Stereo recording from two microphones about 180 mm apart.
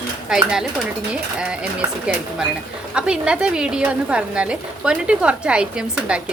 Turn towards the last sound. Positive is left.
turn(degrees=-5)  # may be behind; listen again after turning